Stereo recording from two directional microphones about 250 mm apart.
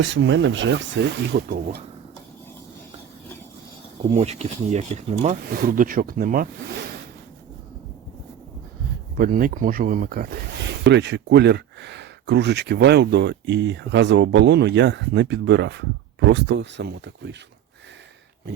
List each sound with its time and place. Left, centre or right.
0.0 s speech: right
4.1 s speech: right
9.1 s speech: right